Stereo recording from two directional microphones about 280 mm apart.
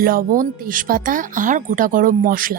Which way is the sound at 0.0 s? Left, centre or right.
Right.